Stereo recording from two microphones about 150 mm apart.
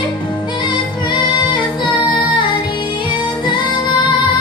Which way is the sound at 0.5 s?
35° left (ahead or behind).